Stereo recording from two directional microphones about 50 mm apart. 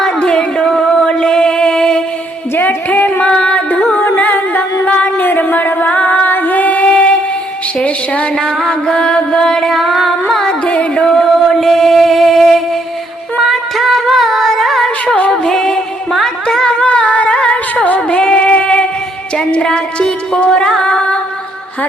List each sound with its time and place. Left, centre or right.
0.2 s music: centre
2.6 s music: left
7.8 s a woman's voice: left
8.6 s music: centre
9.7 s singing: centre
10.4 s music: centre
11.5 s music: centre
13.4 s singing: centre
15.0 s music: left
15.3 s music: centre
16.8 s a sound: left
18.2 s music: left